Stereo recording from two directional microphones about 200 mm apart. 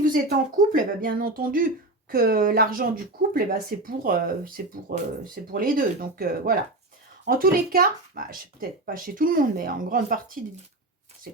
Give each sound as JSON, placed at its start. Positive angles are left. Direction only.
{"t": 0.0, "sound": "speech", "side_deg": -45}